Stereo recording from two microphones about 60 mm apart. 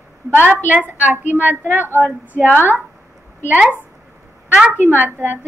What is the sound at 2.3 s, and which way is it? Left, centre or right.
Child singing, right.